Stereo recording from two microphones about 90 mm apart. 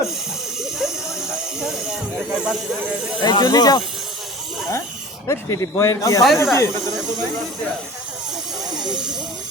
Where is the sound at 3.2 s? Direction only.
50° left (ahead or behind).